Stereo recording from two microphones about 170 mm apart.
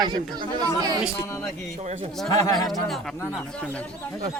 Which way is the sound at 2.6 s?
Centre (ahead or behind).